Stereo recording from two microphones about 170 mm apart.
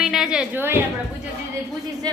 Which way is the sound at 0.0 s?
5° right (ahead or behind).